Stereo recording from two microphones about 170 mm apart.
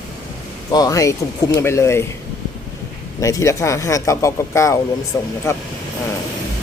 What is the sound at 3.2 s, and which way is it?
Speech, 20° left (ahead or behind).